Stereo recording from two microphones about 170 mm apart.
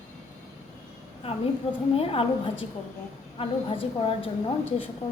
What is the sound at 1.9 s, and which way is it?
A woman's voice, 35° left (ahead or behind).